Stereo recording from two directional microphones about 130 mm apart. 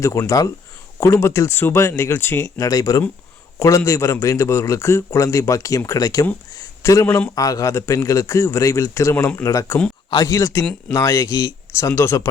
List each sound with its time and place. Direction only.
0.0 s a man's voice: 25° left (ahead or behind)
7.3 s a man's voice: 25° left (ahead or behind)